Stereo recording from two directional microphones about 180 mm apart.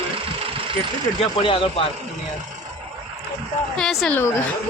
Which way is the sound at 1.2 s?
30° left (ahead or behind).